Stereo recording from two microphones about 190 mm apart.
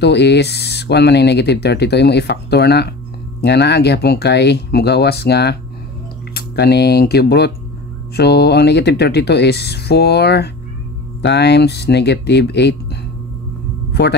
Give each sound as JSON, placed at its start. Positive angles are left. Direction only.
{"t": 0.0, "sound": "speech", "side_deg": 65}